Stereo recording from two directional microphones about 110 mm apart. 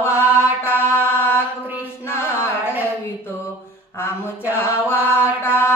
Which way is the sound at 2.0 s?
25° left (ahead or behind).